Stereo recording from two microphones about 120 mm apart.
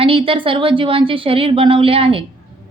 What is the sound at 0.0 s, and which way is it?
A woman's voice, 50° right (ahead or behind).